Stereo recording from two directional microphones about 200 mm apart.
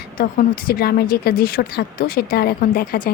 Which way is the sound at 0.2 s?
50° left (ahead or behind).